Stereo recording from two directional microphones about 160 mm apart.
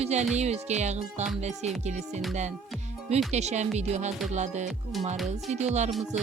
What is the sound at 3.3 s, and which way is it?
Speech, 45° right (ahead or behind).